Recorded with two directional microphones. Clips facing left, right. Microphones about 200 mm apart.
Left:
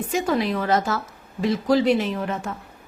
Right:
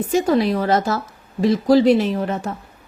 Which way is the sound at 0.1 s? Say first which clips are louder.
Right 5 dB; 35° right (ahead or behind).